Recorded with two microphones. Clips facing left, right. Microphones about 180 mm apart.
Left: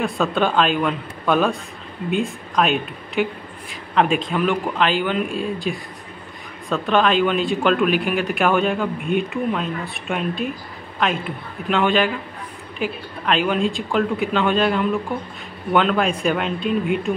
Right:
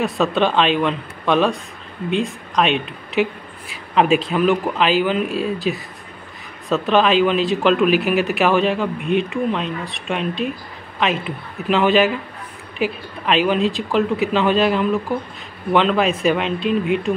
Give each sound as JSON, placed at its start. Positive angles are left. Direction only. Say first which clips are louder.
{"t": 0.0, "sound": "speech", "louder": "right 2 dB", "side_deg": 0}